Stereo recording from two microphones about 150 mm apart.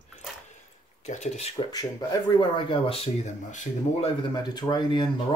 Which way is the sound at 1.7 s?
25° left (ahead or behind).